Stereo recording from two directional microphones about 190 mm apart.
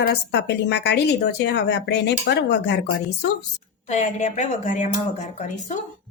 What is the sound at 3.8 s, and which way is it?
A woman's voice, 40° left (ahead or behind).